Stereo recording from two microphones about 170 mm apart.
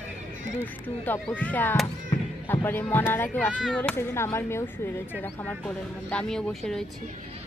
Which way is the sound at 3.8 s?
15° left (ahead or behind).